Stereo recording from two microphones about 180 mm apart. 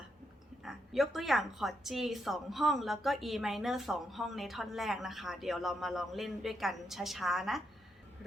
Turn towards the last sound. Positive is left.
turn(degrees=0)  # may be behind; listen again after turning